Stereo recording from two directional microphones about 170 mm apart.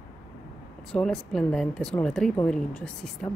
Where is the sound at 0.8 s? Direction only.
5° left (ahead or behind).